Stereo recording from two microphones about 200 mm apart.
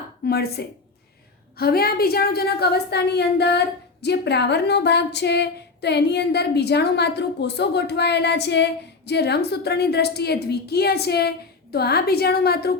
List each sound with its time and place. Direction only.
0.3 s a woman's voice: 50° left (ahead or behind)